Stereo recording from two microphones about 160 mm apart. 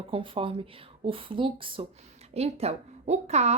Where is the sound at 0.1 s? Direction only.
35° right (ahead or behind).